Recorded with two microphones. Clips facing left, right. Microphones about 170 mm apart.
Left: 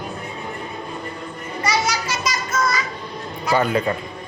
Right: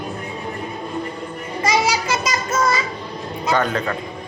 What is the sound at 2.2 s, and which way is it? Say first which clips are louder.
Music: right 2 dB; 25° right (ahead or behind).